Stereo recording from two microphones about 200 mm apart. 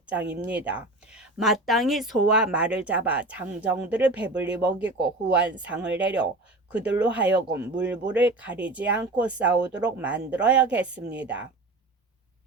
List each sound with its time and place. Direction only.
0.0 s speech: 5° right (ahead or behind)
4.8 s speech: 60° right (ahead or behind)
5.5 s speech: 5° right (ahead or behind)